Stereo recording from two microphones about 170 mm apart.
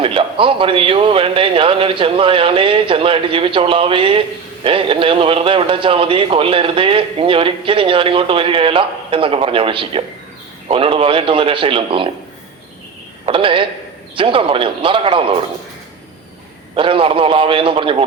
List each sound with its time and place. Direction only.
0.0 s speech: 30° right (ahead or behind)
13.2 s speech: 30° right (ahead or behind)
16.7 s speech: 30° right (ahead or behind)